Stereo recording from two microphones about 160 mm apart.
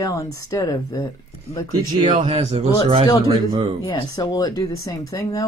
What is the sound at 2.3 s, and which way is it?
Speech, 40° right (ahead or behind).